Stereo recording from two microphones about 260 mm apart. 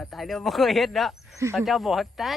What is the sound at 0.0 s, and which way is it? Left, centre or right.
Speech, centre.